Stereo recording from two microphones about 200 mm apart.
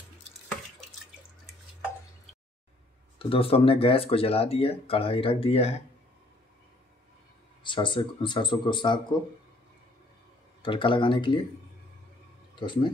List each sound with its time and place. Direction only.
3.2 s speech: 25° left (ahead or behind)
7.6 s speech: 25° left (ahead or behind)
10.6 s speech: 25° left (ahead or behind)
12.5 s speech: 25° left (ahead or behind)